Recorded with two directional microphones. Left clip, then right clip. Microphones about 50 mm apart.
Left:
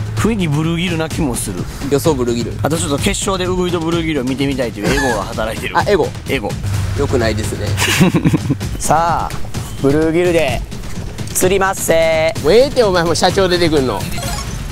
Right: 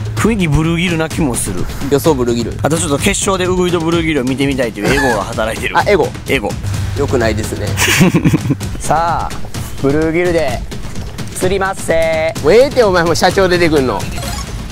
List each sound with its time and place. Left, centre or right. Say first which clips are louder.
0.2 s speech: right 3 dB; right
5.2 s speech: right 3 dB; right
8.8 s speech: even; left
11.4 s speech: left 1 dB; left
12.4 s speech: right 3 dB; right